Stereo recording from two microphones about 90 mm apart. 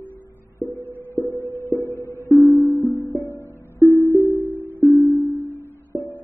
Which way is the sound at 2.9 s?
35° left (ahead or behind).